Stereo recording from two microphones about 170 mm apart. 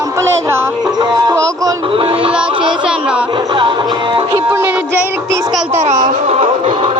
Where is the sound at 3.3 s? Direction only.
30° right (ahead or behind).